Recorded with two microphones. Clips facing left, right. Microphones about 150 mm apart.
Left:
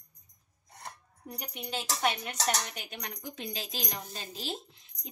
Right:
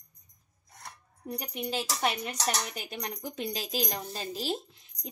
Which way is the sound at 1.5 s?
35° right (ahead or behind).